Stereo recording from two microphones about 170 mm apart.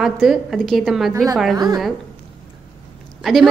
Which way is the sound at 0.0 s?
Centre (ahead or behind).